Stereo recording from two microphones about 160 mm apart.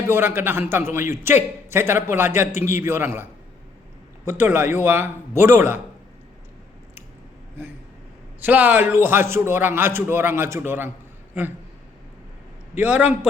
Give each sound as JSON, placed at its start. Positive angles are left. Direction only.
{"t": 0.1, "sound": "a man's voice", "side_deg": -15}
{"t": 4.3, "sound": "a man's voice", "side_deg": -15}
{"t": 8.4, "sound": "a man's voice", "side_deg": -10}
{"t": 12.7, "sound": "a man's voice", "side_deg": -10}